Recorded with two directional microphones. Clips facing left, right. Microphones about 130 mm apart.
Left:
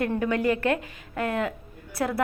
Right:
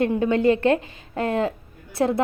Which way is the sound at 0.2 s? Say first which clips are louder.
Right 5 dB; 30° right (ahead or behind).